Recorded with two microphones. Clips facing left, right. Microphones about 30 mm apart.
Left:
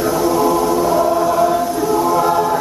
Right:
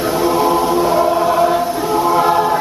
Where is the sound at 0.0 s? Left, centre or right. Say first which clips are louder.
Even; right.